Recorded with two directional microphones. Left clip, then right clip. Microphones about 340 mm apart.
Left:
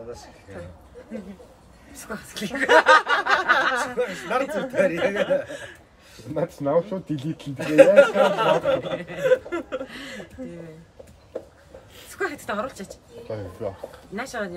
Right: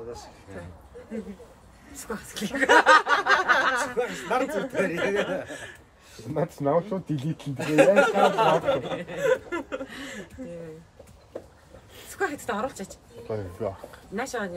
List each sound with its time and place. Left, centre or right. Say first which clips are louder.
2.0 s speech: left 1 dB; centre
8.6 s speech: left 3 dB; centre
12.2 s speech: left 1 dB; centre
13.3 s speech: even; centre
14.1 s speech: even; centre